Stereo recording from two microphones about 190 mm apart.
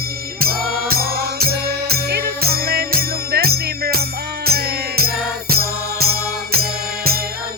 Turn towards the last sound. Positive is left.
turn(degrees=-55)  # may be behind; listen again after turning